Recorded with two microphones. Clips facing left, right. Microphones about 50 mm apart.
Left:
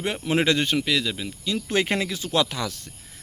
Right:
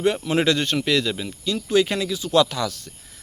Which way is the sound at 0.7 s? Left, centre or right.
Centre.